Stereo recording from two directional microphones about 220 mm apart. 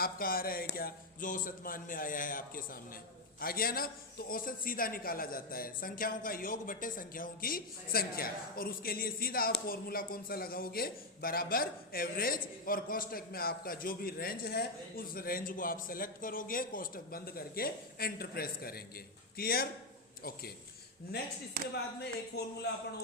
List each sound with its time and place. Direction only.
0.0 s a man's voice: 40° left (ahead or behind)
22.0 s speech: 50° left (ahead or behind)